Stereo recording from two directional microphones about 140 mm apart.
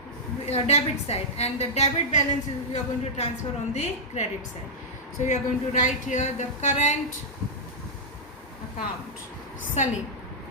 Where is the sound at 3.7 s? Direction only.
50° left (ahead or behind).